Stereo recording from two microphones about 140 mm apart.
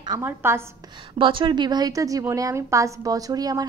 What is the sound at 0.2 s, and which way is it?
Speech, 15° right (ahead or behind).